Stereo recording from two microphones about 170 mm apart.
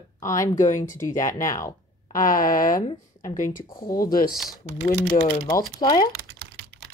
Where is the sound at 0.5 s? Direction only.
50° left (ahead or behind).